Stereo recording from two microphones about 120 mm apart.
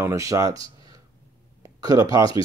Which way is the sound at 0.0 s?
25° right (ahead or behind).